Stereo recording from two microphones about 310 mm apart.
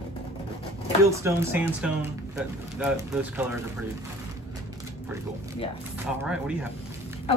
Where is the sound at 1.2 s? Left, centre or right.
Centre.